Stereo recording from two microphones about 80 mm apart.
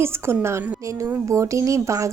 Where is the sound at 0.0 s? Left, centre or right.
Right.